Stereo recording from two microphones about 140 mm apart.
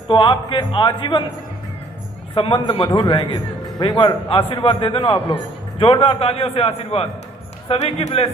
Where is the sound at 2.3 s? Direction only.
40° left (ahead or behind).